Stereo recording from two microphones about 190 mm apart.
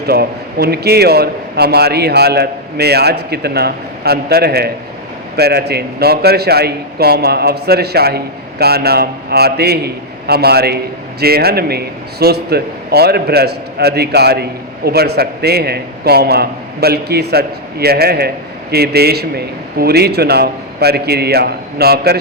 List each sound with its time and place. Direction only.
0.0 s a man's voice: 55° right (ahead or behind)